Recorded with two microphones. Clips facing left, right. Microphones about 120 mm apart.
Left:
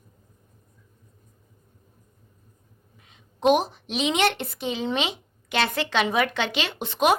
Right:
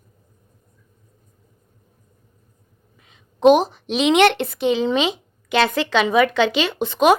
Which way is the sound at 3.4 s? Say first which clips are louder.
Right 7 dB; 90° right.